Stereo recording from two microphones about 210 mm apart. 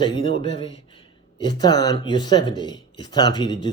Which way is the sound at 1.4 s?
20° left (ahead or behind).